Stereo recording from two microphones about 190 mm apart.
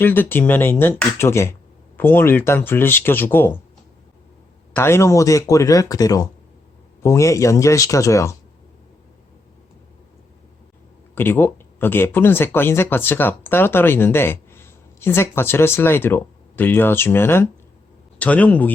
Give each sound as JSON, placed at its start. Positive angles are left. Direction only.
{"t": 0.0, "sound": "speech", "side_deg": 10}
{"t": 4.7, "sound": "speech", "side_deg": 15}
{"t": 11.1, "sound": "speech", "side_deg": 10}